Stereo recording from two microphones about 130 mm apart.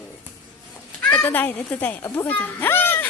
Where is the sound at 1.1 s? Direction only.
10° left (ahead or behind).